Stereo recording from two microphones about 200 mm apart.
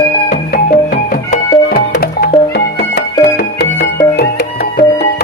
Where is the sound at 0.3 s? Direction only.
50° left (ahead or behind).